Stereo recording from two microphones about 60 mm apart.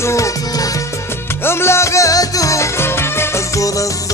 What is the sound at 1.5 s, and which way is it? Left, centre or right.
Music, left.